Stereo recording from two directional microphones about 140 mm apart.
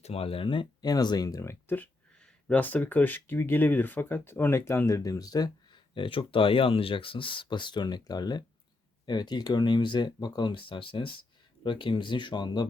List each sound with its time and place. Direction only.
0.0 s speech: 45° left (ahead or behind)